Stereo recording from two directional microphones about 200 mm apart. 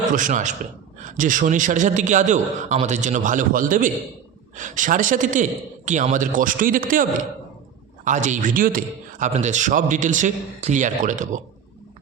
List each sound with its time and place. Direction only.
0.1 s a man's voice: 40° right (ahead or behind)